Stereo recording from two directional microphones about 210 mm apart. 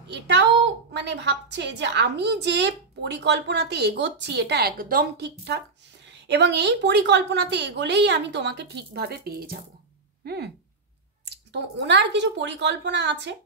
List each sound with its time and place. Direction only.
0.1 s a woman's voice: 55° right (ahead or behind)